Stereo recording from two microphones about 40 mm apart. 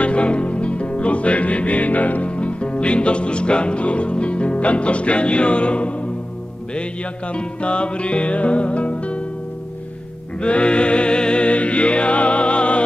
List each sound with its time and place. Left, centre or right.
0.0 s music: left
2.3 s music: left
7.3 s music: left
10.4 s music: left